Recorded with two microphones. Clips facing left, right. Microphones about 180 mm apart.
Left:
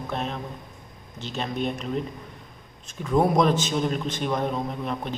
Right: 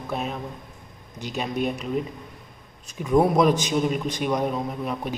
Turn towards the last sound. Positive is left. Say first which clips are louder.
# right 1 dB
turn(degrees=-5)  # may be behind; listen again after turning